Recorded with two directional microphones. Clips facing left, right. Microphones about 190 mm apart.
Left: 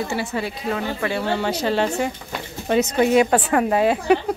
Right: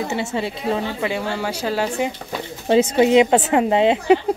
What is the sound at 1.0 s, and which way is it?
Speech, 10° right (ahead or behind).